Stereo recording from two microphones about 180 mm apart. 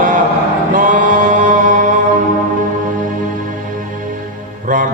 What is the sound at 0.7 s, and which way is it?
Chant, 45° right (ahead or behind).